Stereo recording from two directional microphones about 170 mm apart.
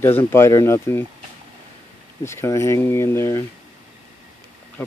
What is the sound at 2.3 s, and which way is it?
Speech, 15° left (ahead or behind).